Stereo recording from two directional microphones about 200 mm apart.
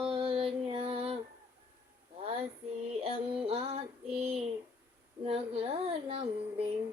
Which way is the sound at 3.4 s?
30° right (ahead or behind).